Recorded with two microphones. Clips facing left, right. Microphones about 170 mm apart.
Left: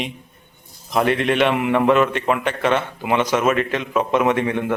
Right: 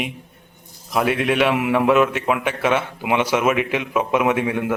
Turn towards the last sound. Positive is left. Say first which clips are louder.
# left 1 dB
turn(degrees=-10)  # may be behind; listen again after turning